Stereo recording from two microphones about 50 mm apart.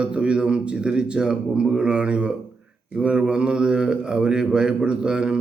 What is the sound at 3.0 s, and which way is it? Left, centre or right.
Mantra, right.